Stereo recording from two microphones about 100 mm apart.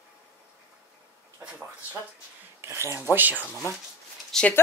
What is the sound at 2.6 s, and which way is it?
Speech, 30° right (ahead or behind).